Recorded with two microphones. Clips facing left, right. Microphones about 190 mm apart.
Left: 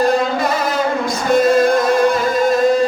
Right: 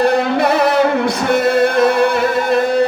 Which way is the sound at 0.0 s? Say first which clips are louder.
Right 2 dB; 65° right (ahead or behind).